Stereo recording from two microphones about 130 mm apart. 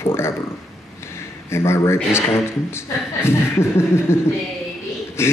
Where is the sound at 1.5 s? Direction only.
20° left (ahead or behind).